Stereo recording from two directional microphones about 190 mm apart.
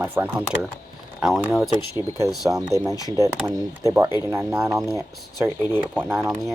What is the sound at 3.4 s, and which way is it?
Speech, 15° right (ahead or behind).